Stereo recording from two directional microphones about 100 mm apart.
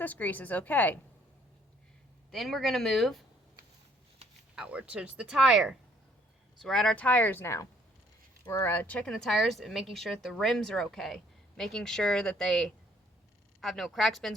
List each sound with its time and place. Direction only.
0.0 s speech: 15° left (ahead or behind)
2.3 s a woman's voice: centre (ahead or behind)
4.5 s speech: 10° right (ahead or behind)
6.6 s a woman's voice: 5° left (ahead or behind)